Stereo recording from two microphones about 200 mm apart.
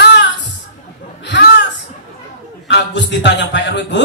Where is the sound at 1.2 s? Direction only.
60° left (ahead or behind).